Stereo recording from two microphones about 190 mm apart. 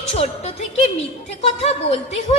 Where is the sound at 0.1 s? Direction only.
35° left (ahead or behind).